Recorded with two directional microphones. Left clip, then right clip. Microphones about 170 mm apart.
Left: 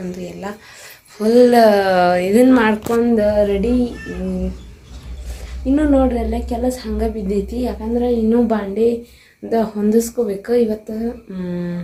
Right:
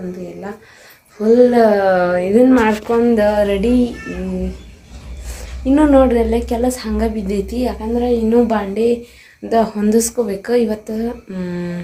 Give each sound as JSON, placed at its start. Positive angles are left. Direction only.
{"t": 1.2, "sound": "a woman's voice", "side_deg": 5}
{"t": 3.2, "sound": "a woman's voice", "side_deg": -15}
{"t": 5.7, "sound": "a woman's voice", "side_deg": -25}